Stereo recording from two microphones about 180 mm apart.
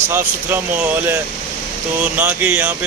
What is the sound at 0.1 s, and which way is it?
Speech, 10° right (ahead or behind).